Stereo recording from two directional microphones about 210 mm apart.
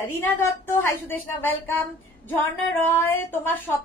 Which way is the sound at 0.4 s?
10° left (ahead or behind).